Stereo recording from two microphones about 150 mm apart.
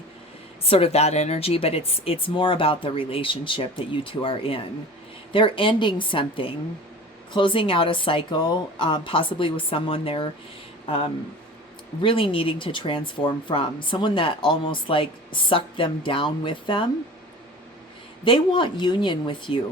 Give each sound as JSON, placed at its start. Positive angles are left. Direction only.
{"t": 0.6, "sound": "speech", "side_deg": 40}
{"t": 12.0, "sound": "speech", "side_deg": 35}
{"t": 18.3, "sound": "speech", "side_deg": 35}